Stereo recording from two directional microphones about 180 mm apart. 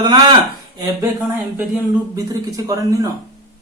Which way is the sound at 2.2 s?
20° right (ahead or behind).